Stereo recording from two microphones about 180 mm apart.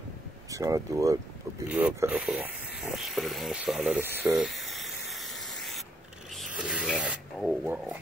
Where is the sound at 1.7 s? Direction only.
5° right (ahead or behind).